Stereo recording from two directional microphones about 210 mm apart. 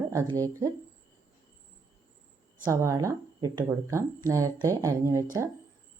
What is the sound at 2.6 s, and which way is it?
Speech, 15° right (ahead or behind).